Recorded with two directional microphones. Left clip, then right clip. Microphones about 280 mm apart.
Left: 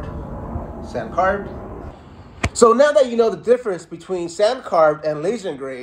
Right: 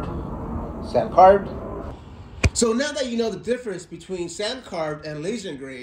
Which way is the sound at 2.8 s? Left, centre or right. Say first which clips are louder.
Left 11 dB; centre.